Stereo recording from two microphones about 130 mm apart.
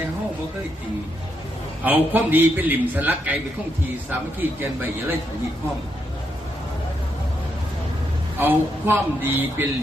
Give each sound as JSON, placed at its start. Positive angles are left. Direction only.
{"t": 1.8, "sound": "a man's voice", "side_deg": -15}
{"t": 8.4, "sound": "a man's voice", "side_deg": -15}